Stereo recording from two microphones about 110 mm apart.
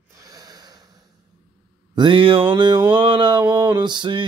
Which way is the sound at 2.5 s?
45° right (ahead or behind).